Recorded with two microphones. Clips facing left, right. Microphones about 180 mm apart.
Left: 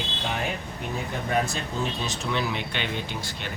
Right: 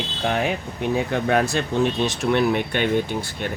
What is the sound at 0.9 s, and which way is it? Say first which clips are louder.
Speech: right 6 dB; 75° right (ahead or behind).